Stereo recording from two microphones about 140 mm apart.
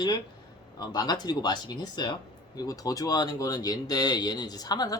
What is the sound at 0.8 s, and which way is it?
Speech, 30° left (ahead or behind).